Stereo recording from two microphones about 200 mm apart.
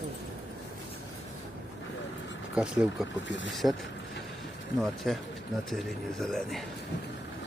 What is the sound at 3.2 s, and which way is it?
Speech, 65° left (ahead or behind).